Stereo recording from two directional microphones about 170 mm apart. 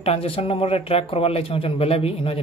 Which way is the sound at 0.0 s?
35° left (ahead or behind).